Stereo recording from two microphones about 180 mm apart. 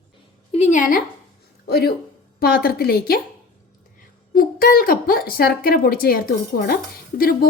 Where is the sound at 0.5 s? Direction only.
40° left (ahead or behind).